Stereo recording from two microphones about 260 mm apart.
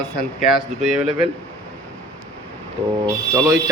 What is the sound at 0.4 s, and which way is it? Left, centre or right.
Speech, centre.